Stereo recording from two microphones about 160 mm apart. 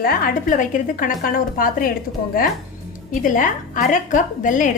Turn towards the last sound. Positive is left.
turn(degrees=55)  # may be behind; listen again after turning